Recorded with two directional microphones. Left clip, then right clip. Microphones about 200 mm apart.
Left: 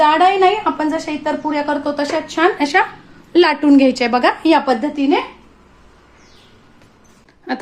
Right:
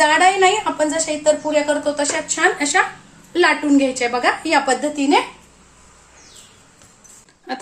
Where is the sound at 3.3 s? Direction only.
40° left (ahead or behind).